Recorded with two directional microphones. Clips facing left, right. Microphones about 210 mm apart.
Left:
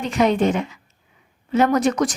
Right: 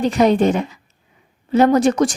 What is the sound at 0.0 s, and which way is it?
A woman's voice, 35° right (ahead or behind).